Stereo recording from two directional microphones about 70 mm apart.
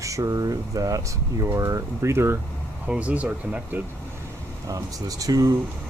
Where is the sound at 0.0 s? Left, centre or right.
Right.